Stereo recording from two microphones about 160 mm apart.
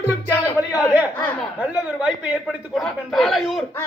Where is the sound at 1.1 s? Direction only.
10° left (ahead or behind).